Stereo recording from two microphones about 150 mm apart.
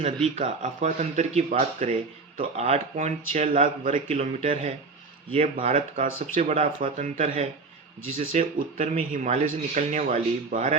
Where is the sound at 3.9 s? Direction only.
35° right (ahead or behind).